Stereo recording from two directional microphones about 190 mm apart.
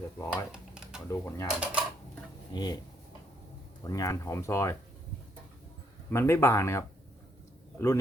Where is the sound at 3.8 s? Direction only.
20° left (ahead or behind).